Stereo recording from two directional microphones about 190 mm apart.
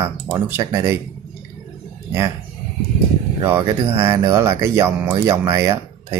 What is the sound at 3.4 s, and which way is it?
Speech, 15° right (ahead or behind).